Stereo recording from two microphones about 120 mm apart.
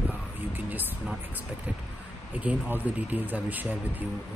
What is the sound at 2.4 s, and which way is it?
Speech, 15° right (ahead or behind).